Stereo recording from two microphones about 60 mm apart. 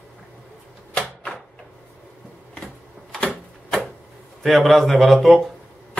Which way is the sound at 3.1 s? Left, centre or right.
Centre.